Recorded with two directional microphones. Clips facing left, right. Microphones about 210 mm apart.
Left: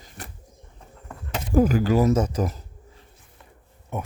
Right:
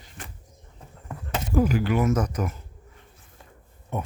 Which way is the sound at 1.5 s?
40° left (ahead or behind).